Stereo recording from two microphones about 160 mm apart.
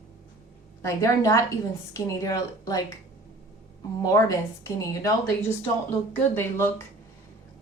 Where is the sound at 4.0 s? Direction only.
20° left (ahead or behind).